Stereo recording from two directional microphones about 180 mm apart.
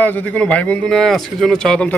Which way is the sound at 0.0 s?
10° left (ahead or behind).